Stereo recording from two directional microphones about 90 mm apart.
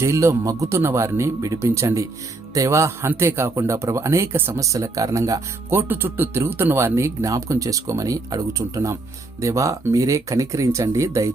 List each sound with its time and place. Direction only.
0.0 s speech: 35° right (ahead or behind)
4.6 s speech: 35° right (ahead or behind)
5.7 s speech: 25° right (ahead or behind)